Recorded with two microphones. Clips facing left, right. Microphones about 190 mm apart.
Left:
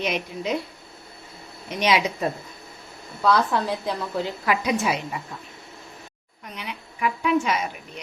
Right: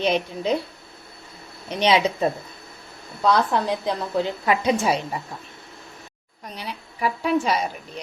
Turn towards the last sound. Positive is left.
turn(degrees=-35)  # may be behind; listen again after turning